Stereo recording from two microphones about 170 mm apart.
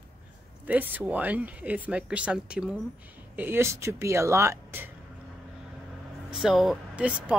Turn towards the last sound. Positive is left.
turn(degrees=-5)  # may be behind; listen again after turning